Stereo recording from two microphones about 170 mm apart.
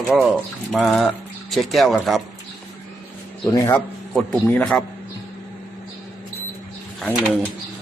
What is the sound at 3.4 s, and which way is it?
Speech, 20° left (ahead or behind).